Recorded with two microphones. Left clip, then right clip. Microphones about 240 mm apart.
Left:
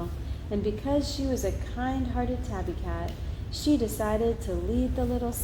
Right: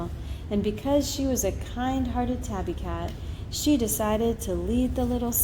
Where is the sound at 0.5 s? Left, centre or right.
Right.